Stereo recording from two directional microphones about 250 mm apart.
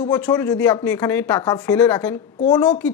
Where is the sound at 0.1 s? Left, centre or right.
Centre.